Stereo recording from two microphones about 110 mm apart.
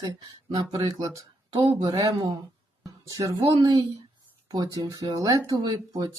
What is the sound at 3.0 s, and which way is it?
Speech, 30° right (ahead or behind).